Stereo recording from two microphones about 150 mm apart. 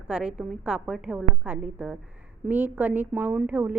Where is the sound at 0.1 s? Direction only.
5° right (ahead or behind).